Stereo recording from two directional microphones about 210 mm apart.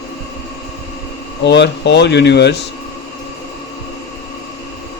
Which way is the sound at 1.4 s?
55° left (ahead or behind).